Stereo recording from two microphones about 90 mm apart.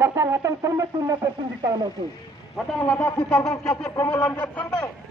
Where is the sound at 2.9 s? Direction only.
25° left (ahead or behind).